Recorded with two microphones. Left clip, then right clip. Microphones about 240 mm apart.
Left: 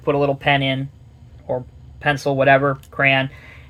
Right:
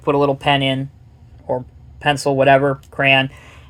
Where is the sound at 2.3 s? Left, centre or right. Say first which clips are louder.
Right 2 dB; right.